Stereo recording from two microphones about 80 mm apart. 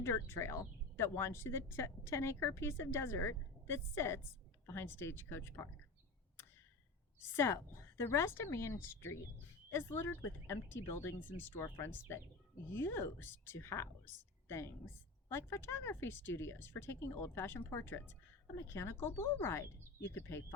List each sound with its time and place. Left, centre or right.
0.0 s a woman's voice: left
7.3 s a woman's voice: left